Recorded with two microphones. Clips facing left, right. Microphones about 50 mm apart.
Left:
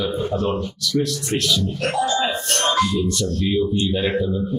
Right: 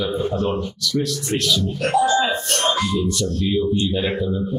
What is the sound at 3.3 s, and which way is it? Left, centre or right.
Speech, centre.